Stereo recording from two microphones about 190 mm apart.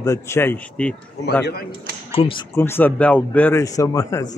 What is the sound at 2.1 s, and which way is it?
Speech, 30° left (ahead or behind).